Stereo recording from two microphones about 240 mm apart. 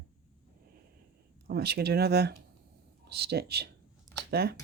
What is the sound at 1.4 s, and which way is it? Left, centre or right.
Speech, right.